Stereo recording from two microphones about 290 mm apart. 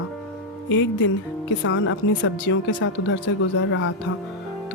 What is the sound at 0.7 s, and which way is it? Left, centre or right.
Speech, left.